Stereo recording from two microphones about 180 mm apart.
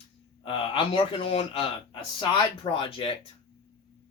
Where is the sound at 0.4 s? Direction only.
30° left (ahead or behind).